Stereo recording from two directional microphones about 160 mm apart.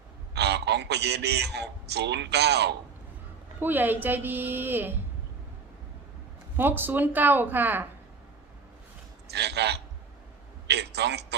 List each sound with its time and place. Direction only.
0.3 s a man's voice: 90° right
3.6 s a woman's voice: 10° right (ahead or behind)
6.6 s a woman's voice: 10° right (ahead or behind)
9.3 s a man's voice: 90° right